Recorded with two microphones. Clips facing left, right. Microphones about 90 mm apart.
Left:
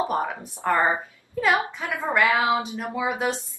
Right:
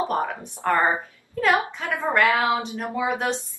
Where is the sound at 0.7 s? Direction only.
15° left (ahead or behind).